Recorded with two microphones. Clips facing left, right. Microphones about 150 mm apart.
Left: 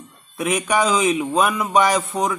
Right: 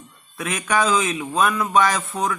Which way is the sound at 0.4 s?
15° left (ahead or behind).